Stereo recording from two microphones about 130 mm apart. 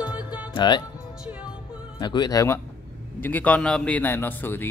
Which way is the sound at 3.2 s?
15° left (ahead or behind).